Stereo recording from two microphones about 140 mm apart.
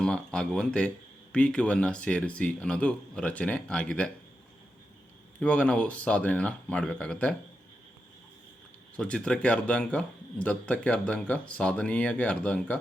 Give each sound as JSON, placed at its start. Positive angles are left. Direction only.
{"t": 0.0, "sound": "a man's voice", "side_deg": 5}
{"t": 5.4, "sound": "a man's voice", "side_deg": 10}
{"t": 9.0, "sound": "a man's voice", "side_deg": 5}